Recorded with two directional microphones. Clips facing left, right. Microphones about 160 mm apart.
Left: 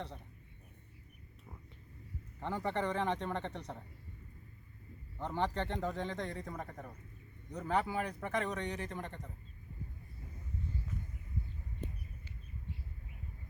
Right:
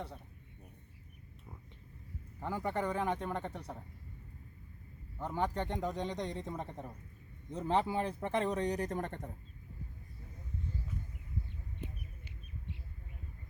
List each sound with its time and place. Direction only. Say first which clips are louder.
2.4 s speech: even; 10° right (ahead or behind)
5.2 s speech: even; 10° right (ahead or behind); by 9.3 s 50° right (ahead or behind)